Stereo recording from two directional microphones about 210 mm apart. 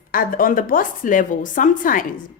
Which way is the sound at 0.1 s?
40° left (ahead or behind).